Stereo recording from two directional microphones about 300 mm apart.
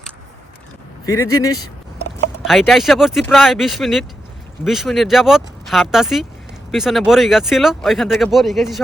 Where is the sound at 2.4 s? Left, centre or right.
Centre.